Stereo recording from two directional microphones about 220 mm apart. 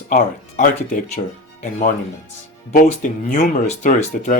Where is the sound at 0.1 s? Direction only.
40° left (ahead or behind).